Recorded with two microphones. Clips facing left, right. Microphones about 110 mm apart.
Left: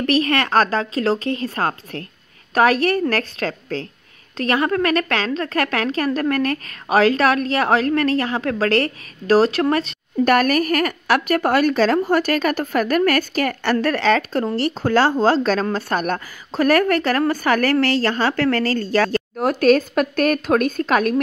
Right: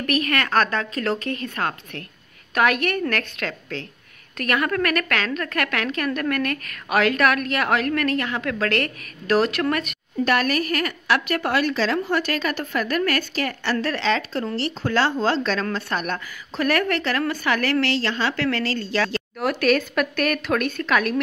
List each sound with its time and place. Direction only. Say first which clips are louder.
0.0 s a woman's voice: left 5 dB; 30° left (ahead or behind)
10.2 s a woman's voice: left 5 dB; 45° left (ahead or behind)